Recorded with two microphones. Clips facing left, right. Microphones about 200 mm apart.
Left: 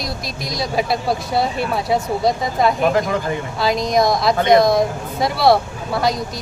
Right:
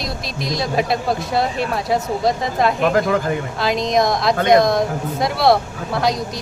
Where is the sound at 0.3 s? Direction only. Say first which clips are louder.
Right 4 dB; centre (ahead or behind).